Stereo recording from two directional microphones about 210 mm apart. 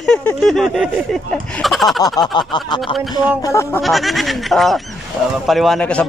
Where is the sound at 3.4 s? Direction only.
15° left (ahead or behind).